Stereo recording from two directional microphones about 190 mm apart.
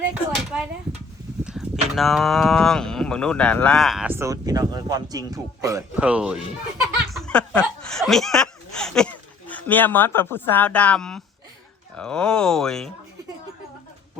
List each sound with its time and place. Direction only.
0.3 s speech: 5° right (ahead or behind)
4.1 s speech: 15° right (ahead or behind)
6.0 s speech: 5° right (ahead or behind)